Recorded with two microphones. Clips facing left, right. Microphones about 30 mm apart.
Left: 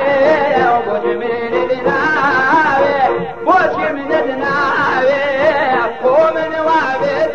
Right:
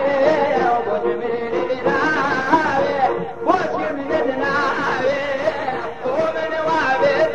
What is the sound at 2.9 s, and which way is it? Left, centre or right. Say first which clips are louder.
Music: left 5 dB; left.